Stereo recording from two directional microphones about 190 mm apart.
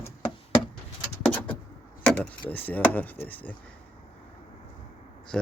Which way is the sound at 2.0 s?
10° left (ahead or behind).